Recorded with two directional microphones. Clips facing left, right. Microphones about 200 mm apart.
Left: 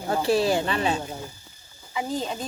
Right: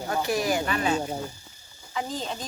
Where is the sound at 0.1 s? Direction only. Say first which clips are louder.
Left 4 dB; 30° left (ahead or behind).